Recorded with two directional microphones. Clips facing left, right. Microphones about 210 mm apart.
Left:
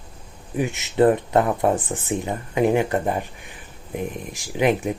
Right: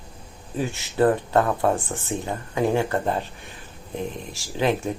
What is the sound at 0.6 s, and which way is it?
Speech, 20° left (ahead or behind).